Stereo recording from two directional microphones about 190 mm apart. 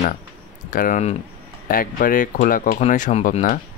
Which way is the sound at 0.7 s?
45° left (ahead or behind).